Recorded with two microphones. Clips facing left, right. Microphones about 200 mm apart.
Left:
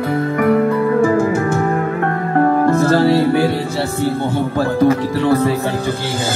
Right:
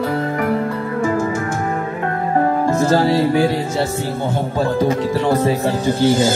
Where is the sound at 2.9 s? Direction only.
20° right (ahead or behind).